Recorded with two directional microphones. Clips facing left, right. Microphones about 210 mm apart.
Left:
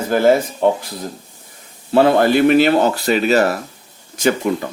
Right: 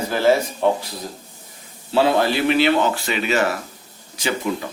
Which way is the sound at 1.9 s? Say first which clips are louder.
Left 5 dB; 50° left (ahead or behind).